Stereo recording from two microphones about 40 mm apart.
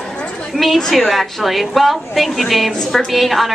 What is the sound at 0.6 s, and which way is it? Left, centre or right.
A woman's voice, centre.